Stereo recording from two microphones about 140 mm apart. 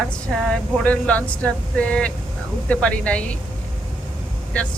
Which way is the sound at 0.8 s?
10° left (ahead or behind).